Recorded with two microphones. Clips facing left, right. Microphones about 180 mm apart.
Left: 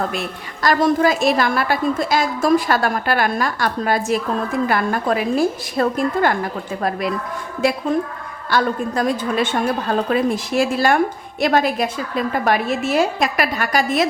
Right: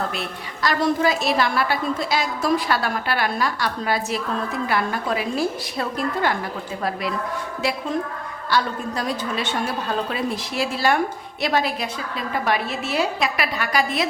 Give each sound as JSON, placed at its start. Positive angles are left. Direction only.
{"t": 0.6, "sound": "a woman's voice", "side_deg": 45}
{"t": 8.4, "sound": "a woman's voice", "side_deg": 50}